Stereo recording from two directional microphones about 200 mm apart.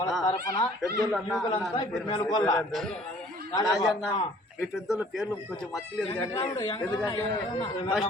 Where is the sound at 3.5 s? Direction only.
20° left (ahead or behind).